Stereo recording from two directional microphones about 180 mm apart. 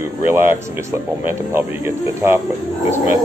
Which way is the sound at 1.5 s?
15° right (ahead or behind).